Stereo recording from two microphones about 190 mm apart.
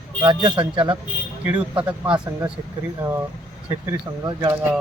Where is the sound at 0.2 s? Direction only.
20° right (ahead or behind).